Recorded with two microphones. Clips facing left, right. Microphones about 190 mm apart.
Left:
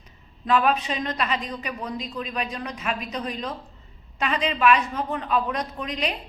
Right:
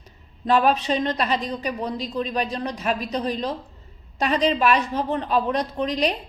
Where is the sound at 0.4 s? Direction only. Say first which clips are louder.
Right 3 dB; 35° right (ahead or behind).